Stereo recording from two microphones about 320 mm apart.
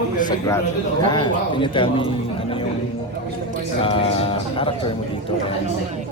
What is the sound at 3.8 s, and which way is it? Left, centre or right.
Speech, centre.